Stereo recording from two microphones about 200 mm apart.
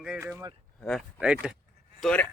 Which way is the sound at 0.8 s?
5° left (ahead or behind).